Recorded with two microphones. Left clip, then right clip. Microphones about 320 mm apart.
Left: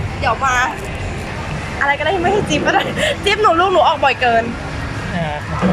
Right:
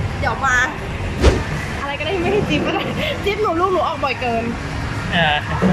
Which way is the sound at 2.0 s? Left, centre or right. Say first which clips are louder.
Left 3 dB; left.